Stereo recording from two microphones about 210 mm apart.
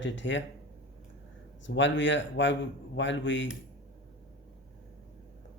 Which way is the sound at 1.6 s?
60° left (ahead or behind).